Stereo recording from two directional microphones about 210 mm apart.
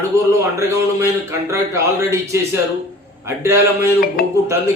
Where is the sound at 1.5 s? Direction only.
15° right (ahead or behind).